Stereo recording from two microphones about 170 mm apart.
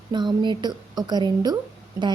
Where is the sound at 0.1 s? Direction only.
25° right (ahead or behind).